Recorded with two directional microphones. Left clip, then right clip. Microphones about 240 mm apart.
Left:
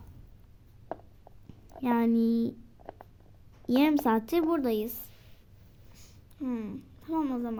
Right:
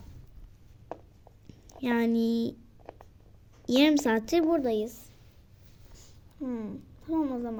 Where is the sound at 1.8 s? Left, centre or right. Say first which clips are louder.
Even; centre.